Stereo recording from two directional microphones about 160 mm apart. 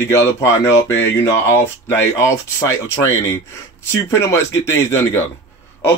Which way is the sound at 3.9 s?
15° left (ahead or behind).